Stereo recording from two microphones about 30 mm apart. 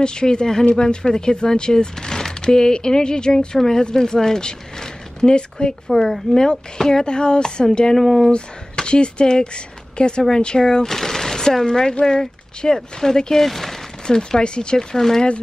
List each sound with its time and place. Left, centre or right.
0.0 s speech: left
3.5 s speech: centre
5.9 s speech: centre
7.9 s speech: centre
8.3 s speech: left
10.9 s a sound: centre
11.6 s speech: left; by 13.7 s centre
14.0 s speech: left
14.8 s speech: centre